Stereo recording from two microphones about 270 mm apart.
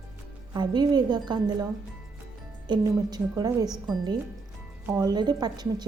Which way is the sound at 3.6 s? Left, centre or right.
Centre.